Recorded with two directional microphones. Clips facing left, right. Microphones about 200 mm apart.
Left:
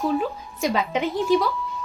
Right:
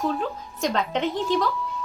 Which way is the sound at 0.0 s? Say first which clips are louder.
Left 3 dB; 10° left (ahead or behind).